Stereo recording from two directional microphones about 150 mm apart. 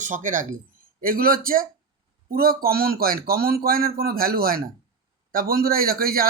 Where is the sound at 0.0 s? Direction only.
60° right (ahead or behind).